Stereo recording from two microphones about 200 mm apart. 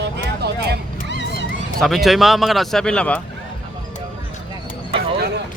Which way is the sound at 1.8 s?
Centre (ahead or behind).